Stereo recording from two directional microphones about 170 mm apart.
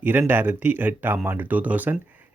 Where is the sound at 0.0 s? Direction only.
10° right (ahead or behind).